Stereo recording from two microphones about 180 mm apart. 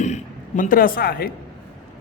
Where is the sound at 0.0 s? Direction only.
45° left (ahead or behind).